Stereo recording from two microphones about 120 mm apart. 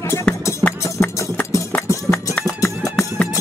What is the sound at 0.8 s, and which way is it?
Music, 20° left (ahead or behind).